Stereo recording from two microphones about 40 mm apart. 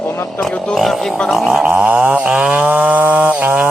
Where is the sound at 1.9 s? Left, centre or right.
Right.